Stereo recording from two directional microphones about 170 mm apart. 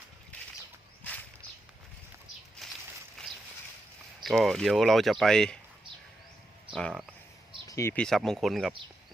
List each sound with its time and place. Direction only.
2.6 s a sound: centre (ahead or behind)
4.2 s speech: centre (ahead or behind)
6.7 s speech: 5° left (ahead or behind)
7.7 s speech: 15° left (ahead or behind)
8.0 s speech: centre (ahead or behind)